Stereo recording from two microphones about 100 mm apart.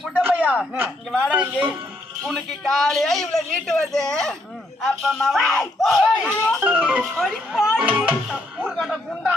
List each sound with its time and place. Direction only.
0.2 s chopping: 15° right (ahead or behind)
1.3 s speech: 15° right (ahead or behind)
2.2 s speech: centre (ahead or behind)
6.7 s speech: 15° right (ahead or behind)
7.0 s speech: centre (ahead or behind)
8.6 s speech: centre (ahead or behind)